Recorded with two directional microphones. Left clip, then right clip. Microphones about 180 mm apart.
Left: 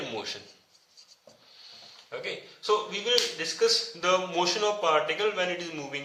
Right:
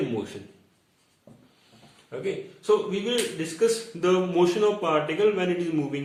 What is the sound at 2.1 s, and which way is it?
Speech, 15° left (ahead or behind).